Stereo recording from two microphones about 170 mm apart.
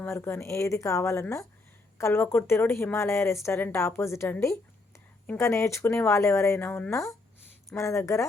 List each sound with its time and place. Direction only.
0.0 s speech: 15° left (ahead or behind)